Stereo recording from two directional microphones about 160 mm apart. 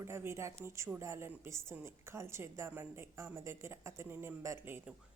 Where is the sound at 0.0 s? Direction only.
15° right (ahead or behind).